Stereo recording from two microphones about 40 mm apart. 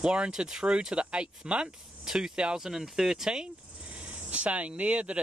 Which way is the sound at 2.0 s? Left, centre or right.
Centre.